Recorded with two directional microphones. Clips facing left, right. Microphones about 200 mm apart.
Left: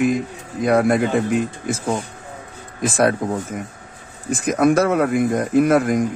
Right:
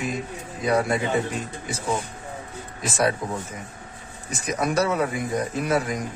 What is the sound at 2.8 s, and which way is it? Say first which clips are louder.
Speech: left 6 dB; 55° left (ahead or behind).